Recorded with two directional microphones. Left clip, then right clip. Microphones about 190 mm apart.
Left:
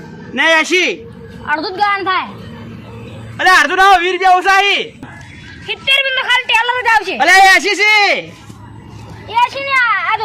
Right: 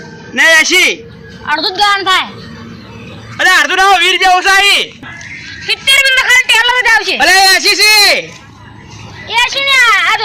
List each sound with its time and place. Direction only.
0.3 s speech: 5° left (ahead or behind)
1.5 s a woman's voice: 25° left (ahead or behind)
3.3 s speech: centre (ahead or behind)
5.6 s a woman's voice: 10° left (ahead or behind)
7.2 s speech: centre (ahead or behind)
9.3 s a child's voice: 20° left (ahead or behind)